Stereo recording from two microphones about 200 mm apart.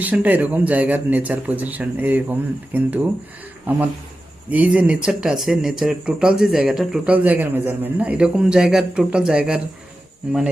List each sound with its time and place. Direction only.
0.0 s speech: 10° right (ahead or behind)